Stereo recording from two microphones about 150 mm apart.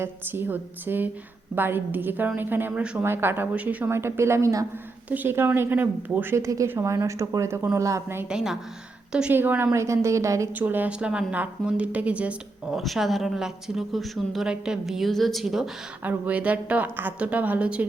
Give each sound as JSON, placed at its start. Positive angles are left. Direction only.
{"t": 0.0, "sound": "a woman's voice", "side_deg": -15}
{"t": 8.3, "sound": "a woman's voice", "side_deg": -5}